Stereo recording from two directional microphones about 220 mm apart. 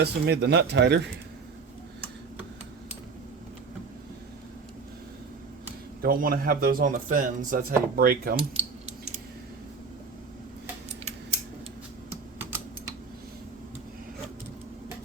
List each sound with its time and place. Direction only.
0.0 s speech: 50° right (ahead or behind)
6.0 s speech: 40° right (ahead or behind)